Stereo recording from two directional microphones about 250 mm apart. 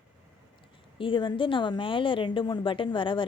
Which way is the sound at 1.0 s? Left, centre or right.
Centre.